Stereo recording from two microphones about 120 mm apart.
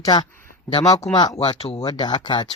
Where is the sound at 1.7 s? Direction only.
35° left (ahead or behind).